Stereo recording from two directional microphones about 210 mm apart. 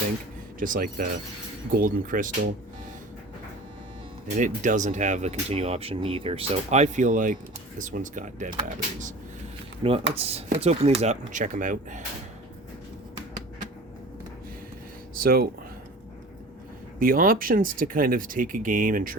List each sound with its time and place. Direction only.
0.6 s speech: 40° right (ahead or behind)
4.4 s speech: 35° right (ahead or behind)
9.8 s speech: 25° right (ahead or behind)
15.1 s a sound: 45° right (ahead or behind)
17.0 s speech: 40° right (ahead or behind)